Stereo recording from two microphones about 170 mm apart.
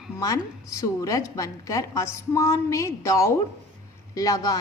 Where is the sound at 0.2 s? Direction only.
20° left (ahead or behind).